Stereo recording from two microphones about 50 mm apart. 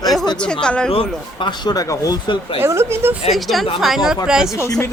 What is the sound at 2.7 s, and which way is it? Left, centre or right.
Speech, right.